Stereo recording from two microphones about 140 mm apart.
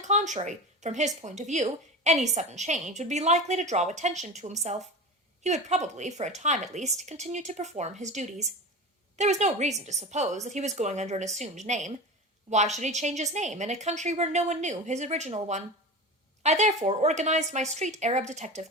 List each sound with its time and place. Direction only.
0.0 s speech: 60° right (ahead or behind)